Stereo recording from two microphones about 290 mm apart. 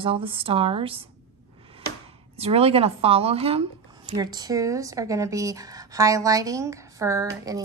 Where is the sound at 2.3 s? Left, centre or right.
Right.